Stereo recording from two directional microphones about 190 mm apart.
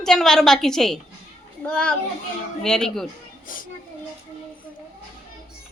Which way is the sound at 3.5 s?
45° left (ahead or behind).